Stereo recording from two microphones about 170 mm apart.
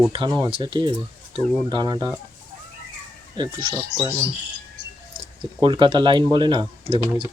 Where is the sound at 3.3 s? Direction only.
30° right (ahead or behind).